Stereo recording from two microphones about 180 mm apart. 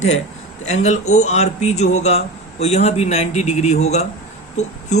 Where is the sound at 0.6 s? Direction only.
40° left (ahead or behind).